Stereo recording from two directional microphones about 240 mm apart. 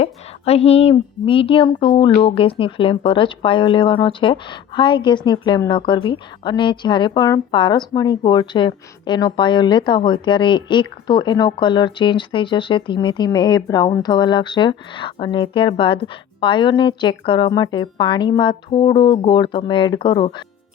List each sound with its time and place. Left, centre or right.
0.0 s speech: left